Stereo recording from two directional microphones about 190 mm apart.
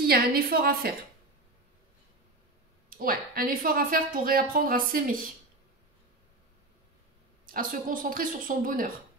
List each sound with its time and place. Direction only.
0.0 s a woman's voice: 55° right (ahead or behind)
3.0 s a woman's voice: 50° right (ahead or behind)
7.5 s a woman's voice: 45° right (ahead or behind)